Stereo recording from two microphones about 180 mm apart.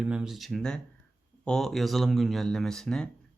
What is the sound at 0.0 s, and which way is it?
Speech, 5° right (ahead or behind).